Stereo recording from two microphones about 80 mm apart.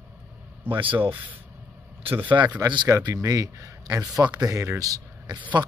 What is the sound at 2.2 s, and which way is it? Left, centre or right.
Speech, right.